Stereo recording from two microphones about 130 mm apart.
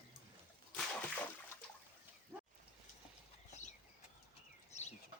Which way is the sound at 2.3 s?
20° right (ahead or behind).